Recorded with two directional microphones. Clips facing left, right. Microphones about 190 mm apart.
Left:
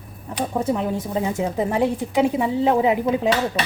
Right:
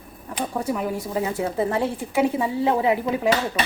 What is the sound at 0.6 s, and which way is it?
A woman's voice, 25° left (ahead or behind).